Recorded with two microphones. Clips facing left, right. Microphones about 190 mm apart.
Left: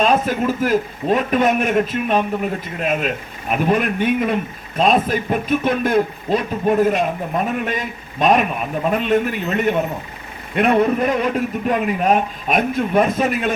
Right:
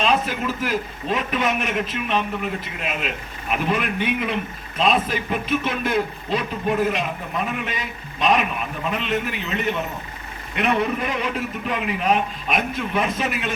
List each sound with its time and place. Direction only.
0.0 s speech: 45° left (ahead or behind)